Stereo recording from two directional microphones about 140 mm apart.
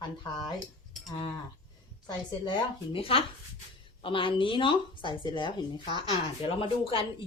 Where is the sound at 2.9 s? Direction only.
45° left (ahead or behind).